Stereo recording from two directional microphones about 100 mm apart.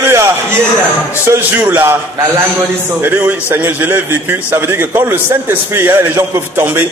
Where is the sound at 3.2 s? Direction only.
20° right (ahead or behind).